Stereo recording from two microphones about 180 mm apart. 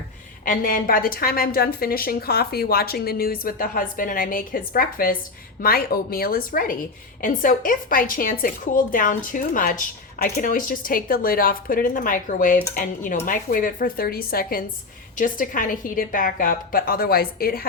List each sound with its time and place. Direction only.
0.4 s a woman's voice: 50° left (ahead or behind)